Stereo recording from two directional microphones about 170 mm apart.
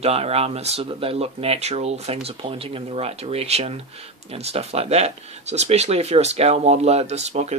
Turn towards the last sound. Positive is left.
turn(degrees=-40)  # may be behind; listen again after turning